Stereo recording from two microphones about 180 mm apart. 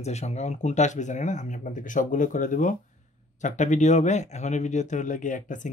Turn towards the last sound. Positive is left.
turn(degrees=45)  # may be behind; listen again after turning